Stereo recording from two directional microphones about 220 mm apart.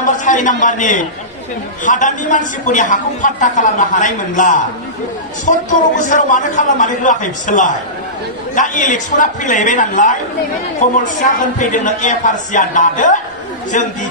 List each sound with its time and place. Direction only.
0.0 s a man's voice: 35° left (ahead or behind)